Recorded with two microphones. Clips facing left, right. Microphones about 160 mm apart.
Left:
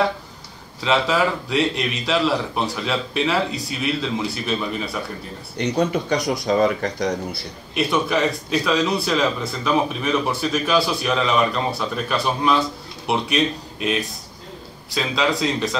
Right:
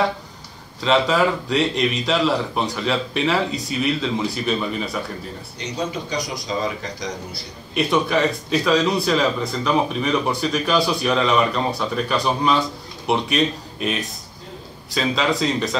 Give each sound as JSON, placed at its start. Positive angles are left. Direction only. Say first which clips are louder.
{"t": 0.7, "sound": "a man's voice", "louder": "right 2 dB", "side_deg": 0}
{"t": 5.6, "sound": "speech", "louder": "left 7 dB", "side_deg": 60}
{"t": 7.7, "sound": "a man's voice", "louder": "right 1 dB", "side_deg": 0}